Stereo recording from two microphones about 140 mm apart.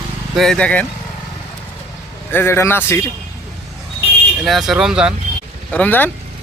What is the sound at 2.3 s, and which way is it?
Speech, 15° left (ahead or behind).